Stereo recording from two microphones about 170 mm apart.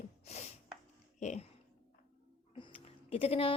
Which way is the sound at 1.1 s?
45° left (ahead or behind).